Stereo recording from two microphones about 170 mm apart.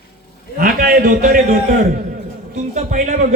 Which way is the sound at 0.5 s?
60° right (ahead or behind).